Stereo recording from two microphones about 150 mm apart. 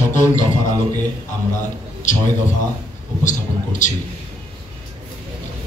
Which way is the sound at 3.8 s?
55° left (ahead or behind).